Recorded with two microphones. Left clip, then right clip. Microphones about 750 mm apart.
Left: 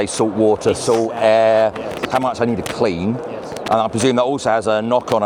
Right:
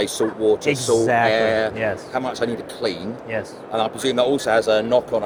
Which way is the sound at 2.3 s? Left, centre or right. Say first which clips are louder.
Left 5 dB; left.